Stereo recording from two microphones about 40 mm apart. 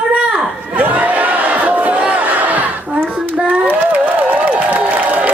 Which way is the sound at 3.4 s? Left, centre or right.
Right.